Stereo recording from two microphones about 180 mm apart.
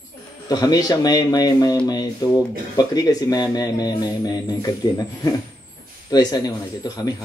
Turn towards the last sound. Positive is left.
turn(degrees=20)  # may be behind; listen again after turning